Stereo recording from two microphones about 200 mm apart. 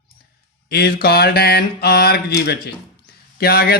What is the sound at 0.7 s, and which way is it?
Speech, 50° left (ahead or behind).